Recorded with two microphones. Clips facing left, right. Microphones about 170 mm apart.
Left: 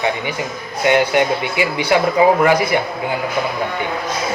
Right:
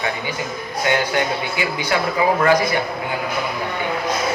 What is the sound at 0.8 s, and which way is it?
Speech, 20° left (ahead or behind).